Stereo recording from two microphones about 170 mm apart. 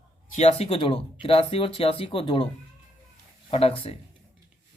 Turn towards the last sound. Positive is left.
turn(degrees=35)  # may be behind; listen again after turning